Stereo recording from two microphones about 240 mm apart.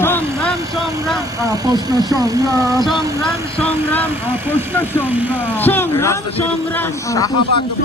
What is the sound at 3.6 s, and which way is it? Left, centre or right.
Speech, centre.